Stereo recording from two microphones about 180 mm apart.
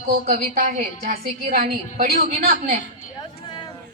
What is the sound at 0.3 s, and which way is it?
A woman's voice, 50° right (ahead or behind).